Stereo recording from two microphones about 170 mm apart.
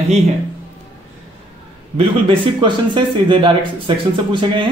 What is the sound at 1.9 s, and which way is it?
Speech, 30° right (ahead or behind).